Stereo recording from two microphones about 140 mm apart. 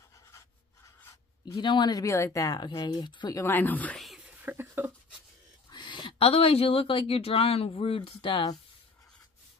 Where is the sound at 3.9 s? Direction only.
Centre (ahead or behind).